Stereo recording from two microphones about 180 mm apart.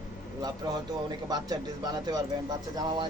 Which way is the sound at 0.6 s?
20° right (ahead or behind).